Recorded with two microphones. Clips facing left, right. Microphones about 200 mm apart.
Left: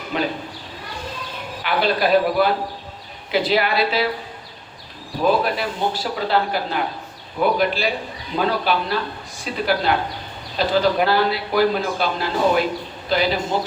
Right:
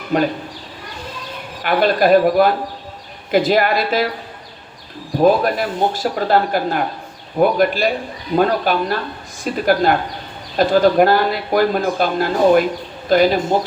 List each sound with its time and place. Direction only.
0.1 s speech: 45° right (ahead or behind)
1.6 s speech: 50° right (ahead or behind)
5.2 s speech: 45° right (ahead or behind)